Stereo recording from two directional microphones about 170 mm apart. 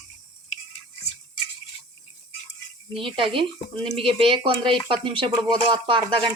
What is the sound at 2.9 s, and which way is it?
Speech, 30° right (ahead or behind).